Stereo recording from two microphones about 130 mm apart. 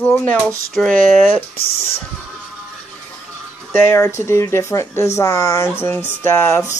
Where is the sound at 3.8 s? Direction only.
20° left (ahead or behind).